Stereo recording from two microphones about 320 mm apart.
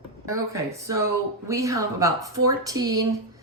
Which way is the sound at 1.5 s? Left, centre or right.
Centre.